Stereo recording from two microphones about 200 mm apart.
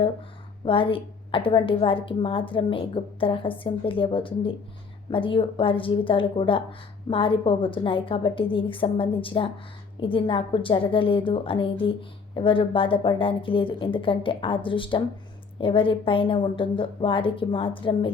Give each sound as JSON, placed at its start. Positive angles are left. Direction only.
{"t": 0.6, "sound": "a woman's voice", "side_deg": 25}